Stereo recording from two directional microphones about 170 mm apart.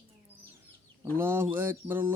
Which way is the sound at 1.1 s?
15° right (ahead or behind).